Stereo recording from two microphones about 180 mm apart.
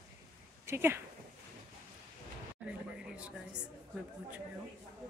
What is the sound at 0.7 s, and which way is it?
Speech, 15° right (ahead or behind).